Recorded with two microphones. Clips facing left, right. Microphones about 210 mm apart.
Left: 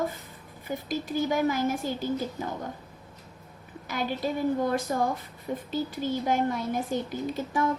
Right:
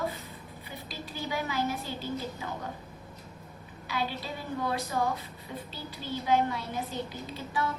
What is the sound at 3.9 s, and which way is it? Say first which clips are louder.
A woman's voice: left 5 dB; 45° left (ahead or behind).